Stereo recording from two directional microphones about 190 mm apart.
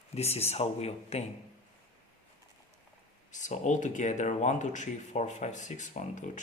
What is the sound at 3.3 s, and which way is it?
Speech, 40° left (ahead or behind).